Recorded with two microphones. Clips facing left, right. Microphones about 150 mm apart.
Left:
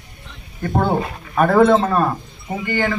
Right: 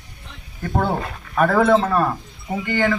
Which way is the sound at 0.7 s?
20° left (ahead or behind).